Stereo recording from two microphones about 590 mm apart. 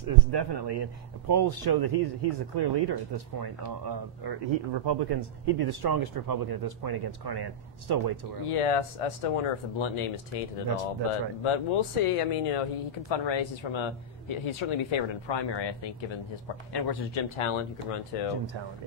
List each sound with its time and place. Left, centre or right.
0.0 s speech: right
8.5 s speech: left
11.4 s speech: left
13.1 s speech: left
17.4 s speech: left